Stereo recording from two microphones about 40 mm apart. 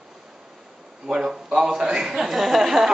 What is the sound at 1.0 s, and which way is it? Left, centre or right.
Speech, centre.